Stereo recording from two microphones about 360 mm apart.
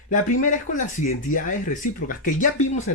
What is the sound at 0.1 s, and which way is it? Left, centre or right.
Speech, left.